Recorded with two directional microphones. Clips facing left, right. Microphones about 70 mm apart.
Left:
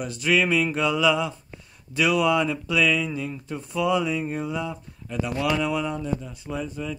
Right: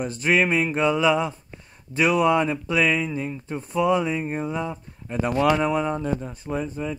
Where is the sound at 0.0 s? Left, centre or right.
Right.